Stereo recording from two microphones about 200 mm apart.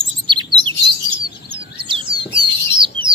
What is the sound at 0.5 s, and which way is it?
Bird, 25° right (ahead or behind).